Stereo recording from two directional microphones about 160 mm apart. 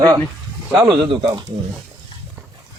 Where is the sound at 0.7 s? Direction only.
25° right (ahead or behind).